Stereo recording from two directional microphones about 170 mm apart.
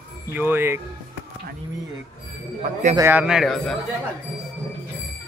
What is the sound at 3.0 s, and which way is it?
Speech, 10° right (ahead or behind).